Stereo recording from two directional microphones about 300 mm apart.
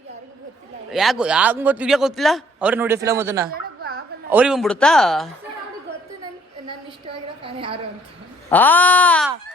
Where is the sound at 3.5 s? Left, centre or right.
Right.